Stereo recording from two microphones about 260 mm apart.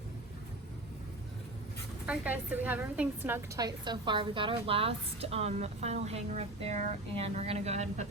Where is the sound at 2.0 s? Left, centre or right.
Centre; by 8.0 s right.